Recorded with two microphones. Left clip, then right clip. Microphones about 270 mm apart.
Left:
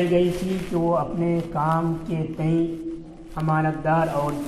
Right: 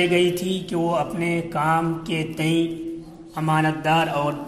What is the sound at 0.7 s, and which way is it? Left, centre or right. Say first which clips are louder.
A man's voice: left 1 dB; right.